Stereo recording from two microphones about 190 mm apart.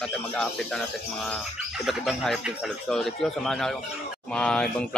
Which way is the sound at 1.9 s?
Centre (ahead or behind).